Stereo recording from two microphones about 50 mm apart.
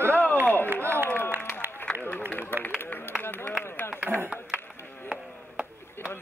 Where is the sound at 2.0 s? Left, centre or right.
Left.